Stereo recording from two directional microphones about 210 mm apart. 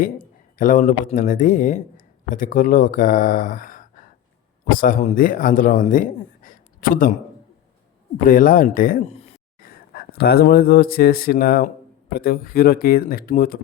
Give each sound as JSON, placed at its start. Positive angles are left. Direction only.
{"t": 0.0, "sound": "a sound", "side_deg": 40}
{"t": 1.1, "sound": "a man's voice", "side_deg": 40}
{"t": 8.2, "sound": "speech", "side_deg": 40}
{"t": 9.6, "sound": "speech", "side_deg": 45}